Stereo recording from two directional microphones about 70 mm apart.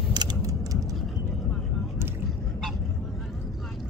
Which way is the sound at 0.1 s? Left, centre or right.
Right.